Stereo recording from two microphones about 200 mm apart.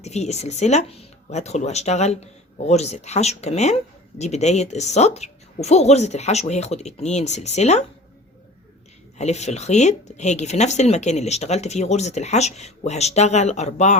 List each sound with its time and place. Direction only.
0.0 s speech: 35° left (ahead or behind)
9.1 s speech: 35° left (ahead or behind)